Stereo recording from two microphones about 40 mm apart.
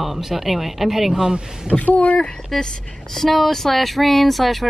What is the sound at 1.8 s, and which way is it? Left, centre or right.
Speech, left.